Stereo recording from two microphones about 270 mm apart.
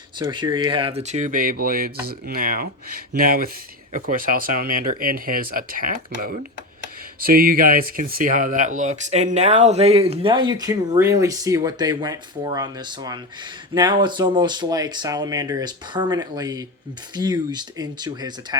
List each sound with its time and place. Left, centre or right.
0.2 s speech: centre